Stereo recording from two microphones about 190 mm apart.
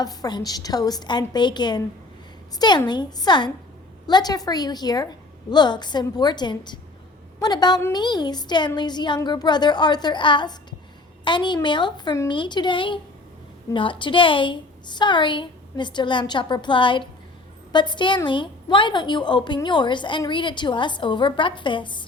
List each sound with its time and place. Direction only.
0.0 s a woman's voice: 20° left (ahead or behind)